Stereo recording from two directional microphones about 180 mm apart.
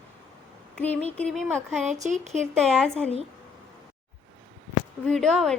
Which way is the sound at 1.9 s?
40° right (ahead or behind).